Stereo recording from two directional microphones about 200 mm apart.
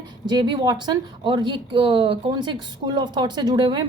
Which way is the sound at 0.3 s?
20° right (ahead or behind).